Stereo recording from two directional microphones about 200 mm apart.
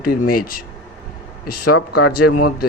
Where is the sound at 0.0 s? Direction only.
45° left (ahead or behind).